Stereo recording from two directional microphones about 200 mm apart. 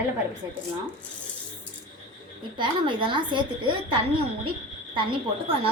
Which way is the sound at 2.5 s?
25° right (ahead or behind).